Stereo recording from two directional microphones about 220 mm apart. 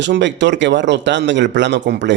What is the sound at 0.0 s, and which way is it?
Speech, 55° right (ahead or behind).